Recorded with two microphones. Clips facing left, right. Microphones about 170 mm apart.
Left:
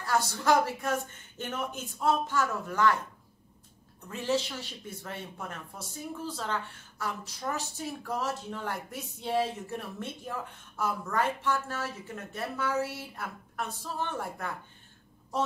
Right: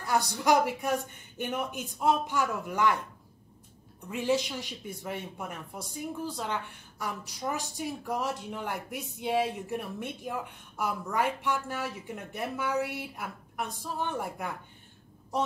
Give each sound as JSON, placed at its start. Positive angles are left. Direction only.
{"t": 0.0, "sound": "speech", "side_deg": -15}
{"t": 4.1, "sound": "speech", "side_deg": -15}